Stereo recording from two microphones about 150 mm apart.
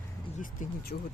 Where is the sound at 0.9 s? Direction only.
65° left (ahead or behind).